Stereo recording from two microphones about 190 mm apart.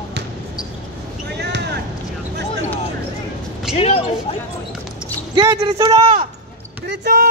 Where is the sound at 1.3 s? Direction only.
60° right (ahead or behind).